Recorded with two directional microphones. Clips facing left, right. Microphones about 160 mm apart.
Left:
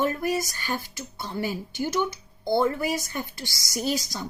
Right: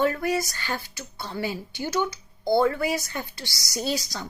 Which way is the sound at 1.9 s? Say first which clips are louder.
Even; 20° left (ahead or behind).